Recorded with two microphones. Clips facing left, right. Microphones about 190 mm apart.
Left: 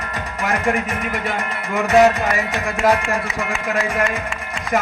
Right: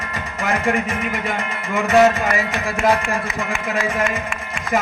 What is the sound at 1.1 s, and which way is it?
Music, 45° left (ahead or behind).